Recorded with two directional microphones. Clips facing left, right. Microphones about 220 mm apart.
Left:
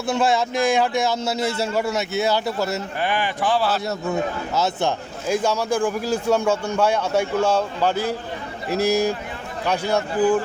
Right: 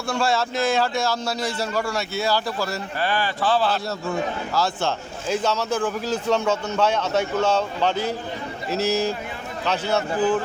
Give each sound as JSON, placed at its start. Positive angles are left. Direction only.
{"t": 0.1, "sound": "a man's voice", "side_deg": 20}